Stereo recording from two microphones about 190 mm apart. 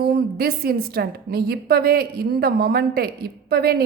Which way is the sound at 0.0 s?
55° right (ahead or behind).